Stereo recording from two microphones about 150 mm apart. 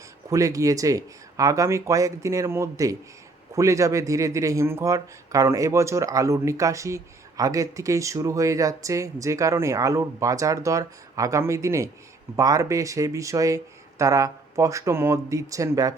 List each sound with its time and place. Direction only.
0.3 s a man's voice: 20° right (ahead or behind)